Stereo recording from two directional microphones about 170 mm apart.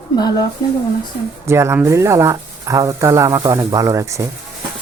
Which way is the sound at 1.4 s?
15° right (ahead or behind).